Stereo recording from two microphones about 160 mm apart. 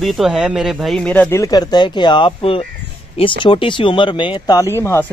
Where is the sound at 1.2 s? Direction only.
20° left (ahead or behind).